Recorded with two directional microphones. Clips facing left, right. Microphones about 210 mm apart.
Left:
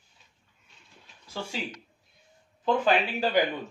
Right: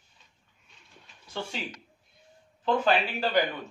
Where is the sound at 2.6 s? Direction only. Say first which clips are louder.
Left 1 dB; 10° left (ahead or behind).